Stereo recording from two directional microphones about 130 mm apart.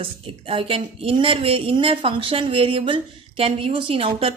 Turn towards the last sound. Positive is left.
turn(degrees=-45)  # may be behind; listen again after turning